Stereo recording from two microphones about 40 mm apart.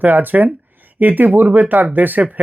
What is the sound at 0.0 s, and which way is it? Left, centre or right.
Speech, right.